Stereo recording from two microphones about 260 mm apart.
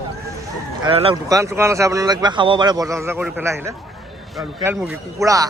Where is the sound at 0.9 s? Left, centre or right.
Centre.